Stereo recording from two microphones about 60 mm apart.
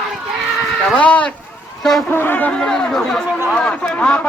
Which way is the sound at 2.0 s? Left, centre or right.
Left.